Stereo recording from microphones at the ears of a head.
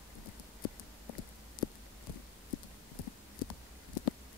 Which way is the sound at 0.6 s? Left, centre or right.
Left.